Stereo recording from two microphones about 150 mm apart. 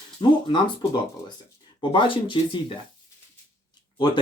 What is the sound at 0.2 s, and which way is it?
Speech, 35° left (ahead or behind).